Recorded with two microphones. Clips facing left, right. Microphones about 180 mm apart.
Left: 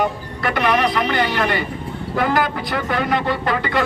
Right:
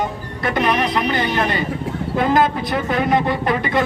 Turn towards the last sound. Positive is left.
turn(degrees=-20)  # may be behind; listen again after turning